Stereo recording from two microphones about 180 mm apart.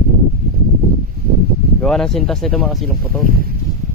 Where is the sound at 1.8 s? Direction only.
5° left (ahead or behind).